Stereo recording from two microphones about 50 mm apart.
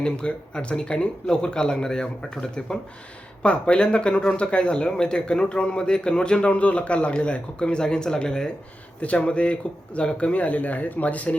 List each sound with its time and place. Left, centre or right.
0.0 s speech: centre